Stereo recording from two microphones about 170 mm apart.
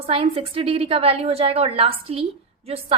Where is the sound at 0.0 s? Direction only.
30° right (ahead or behind).